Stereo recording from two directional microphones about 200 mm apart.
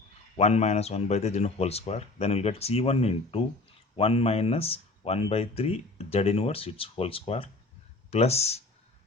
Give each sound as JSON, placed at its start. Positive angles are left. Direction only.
{"t": 0.3, "sound": "speech", "side_deg": 35}